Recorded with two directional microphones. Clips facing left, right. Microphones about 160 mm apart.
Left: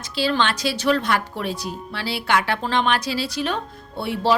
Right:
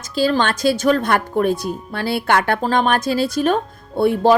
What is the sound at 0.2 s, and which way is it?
Speech, 45° right (ahead or behind).